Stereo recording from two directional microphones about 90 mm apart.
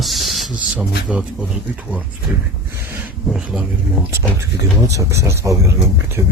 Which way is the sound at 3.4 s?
10° right (ahead or behind).